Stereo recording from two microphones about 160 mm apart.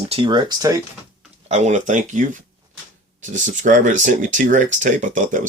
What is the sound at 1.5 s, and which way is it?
Speech, 45° right (ahead or behind).